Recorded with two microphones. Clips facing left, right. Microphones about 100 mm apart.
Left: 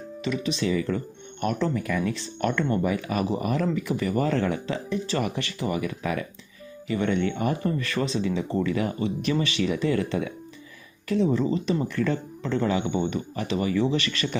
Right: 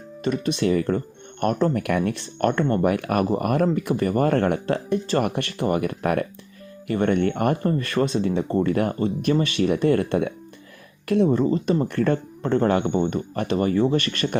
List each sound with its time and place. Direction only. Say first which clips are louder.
0.3 s speech: right 4 dB; 50° right (ahead or behind)
1.7 s speech: right 4 dB; 65° right (ahead or behind); by 14.3 s 50° right (ahead or behind)